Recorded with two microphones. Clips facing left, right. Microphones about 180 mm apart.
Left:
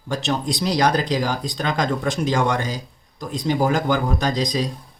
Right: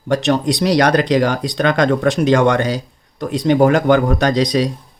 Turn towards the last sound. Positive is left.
turn(degrees=-70)  # may be behind; listen again after turning